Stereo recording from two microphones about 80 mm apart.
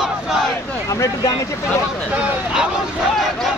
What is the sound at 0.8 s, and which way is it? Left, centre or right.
Speech, left.